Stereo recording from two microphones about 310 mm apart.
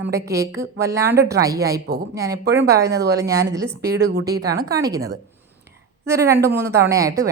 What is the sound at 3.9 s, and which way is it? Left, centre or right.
Speech, right.